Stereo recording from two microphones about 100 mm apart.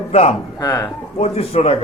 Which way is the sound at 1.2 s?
85° left.